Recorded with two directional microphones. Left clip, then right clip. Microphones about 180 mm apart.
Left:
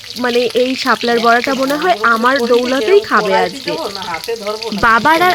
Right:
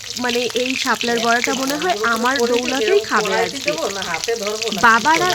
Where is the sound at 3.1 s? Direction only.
15° left (ahead or behind).